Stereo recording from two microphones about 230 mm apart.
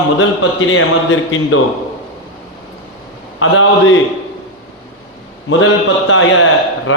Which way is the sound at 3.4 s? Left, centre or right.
Left.